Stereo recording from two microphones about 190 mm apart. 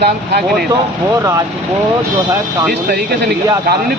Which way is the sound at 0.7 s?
15° right (ahead or behind).